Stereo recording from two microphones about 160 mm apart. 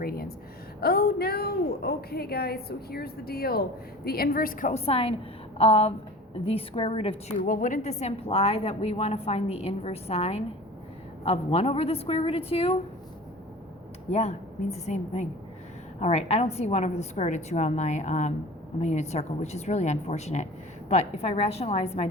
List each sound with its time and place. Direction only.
0.0 s a woman's voice: 70° left (ahead or behind)
4.7 s a woman's voice: 40° left (ahead or behind)
7.4 s a woman's voice: 55° left (ahead or behind); by 12.7 s 40° left (ahead or behind)
14.1 s a woman's voice: 40° left (ahead or behind)